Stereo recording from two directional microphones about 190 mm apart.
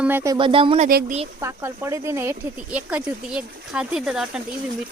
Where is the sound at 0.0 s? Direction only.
10° right (ahead or behind).